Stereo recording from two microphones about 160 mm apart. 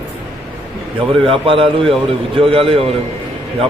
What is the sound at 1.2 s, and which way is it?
A man's voice, 35° right (ahead or behind).